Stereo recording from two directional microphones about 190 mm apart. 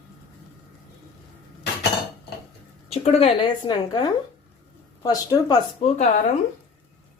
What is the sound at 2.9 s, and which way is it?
A woman's voice, 30° left (ahead or behind).